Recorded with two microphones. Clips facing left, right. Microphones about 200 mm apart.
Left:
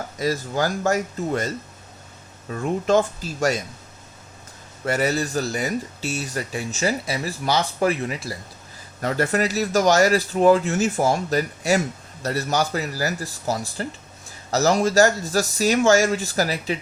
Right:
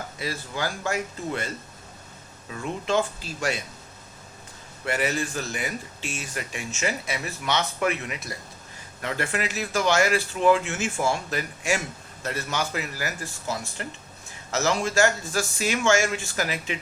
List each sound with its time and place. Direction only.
0.2 s speech: 40° left (ahead or behind)
4.9 s speech: 40° left (ahead or behind)